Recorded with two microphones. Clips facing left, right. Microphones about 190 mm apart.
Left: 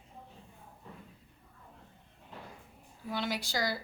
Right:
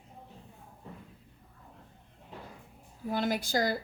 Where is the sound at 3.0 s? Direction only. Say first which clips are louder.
Right 5 dB; 50° right (ahead or behind).